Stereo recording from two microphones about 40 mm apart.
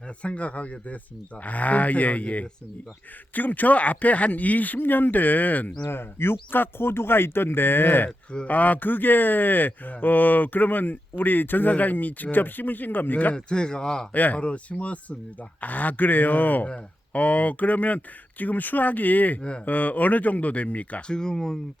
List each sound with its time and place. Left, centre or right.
0.2 s speech: left
5.9 s speech: left
8.4 s speech: left
13.3 s speech: left
14.1 s speech: left
19.4 s speech: left
19.6 s speech: left
21.1 s speech: centre